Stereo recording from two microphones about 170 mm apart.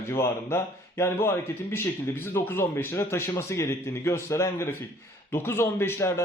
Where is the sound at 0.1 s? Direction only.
15° left (ahead or behind).